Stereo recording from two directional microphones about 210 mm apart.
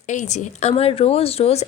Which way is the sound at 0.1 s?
35° left (ahead or behind).